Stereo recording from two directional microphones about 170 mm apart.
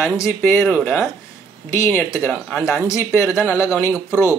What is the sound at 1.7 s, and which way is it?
Speech, 15° left (ahead or behind).